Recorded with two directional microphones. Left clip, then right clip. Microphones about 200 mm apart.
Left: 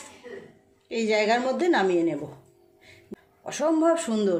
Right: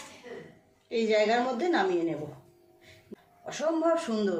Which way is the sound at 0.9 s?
40° left (ahead or behind).